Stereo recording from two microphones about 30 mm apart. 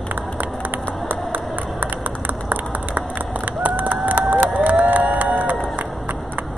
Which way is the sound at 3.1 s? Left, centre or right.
Right.